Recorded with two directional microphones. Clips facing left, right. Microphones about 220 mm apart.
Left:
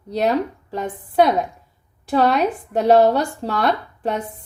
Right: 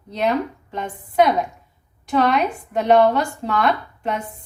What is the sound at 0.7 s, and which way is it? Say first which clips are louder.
Speech: left 3 dB; 35° left (ahead or behind).